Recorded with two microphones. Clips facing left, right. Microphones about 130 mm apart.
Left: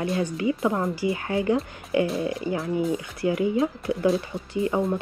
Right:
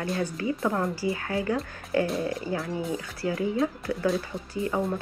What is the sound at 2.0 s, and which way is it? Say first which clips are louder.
Speech: left 3 dB; centre (ahead or behind).